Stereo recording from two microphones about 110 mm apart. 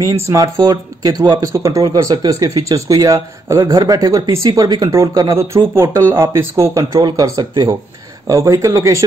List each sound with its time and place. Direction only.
0.0 s speech: 35° right (ahead or behind)
3.7 s speech: 35° right (ahead or behind)